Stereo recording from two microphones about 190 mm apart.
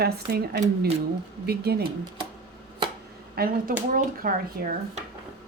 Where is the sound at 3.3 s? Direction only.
50° right (ahead or behind).